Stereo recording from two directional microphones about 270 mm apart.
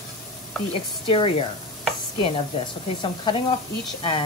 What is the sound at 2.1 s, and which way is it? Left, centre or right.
Stir, left.